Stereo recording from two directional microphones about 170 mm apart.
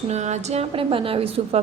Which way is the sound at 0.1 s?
40° right (ahead or behind).